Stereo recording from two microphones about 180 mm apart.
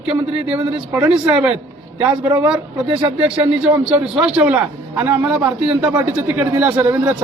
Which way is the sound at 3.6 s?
5° right (ahead or behind).